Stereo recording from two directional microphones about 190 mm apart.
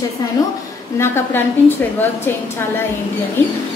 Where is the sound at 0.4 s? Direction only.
20° left (ahead or behind).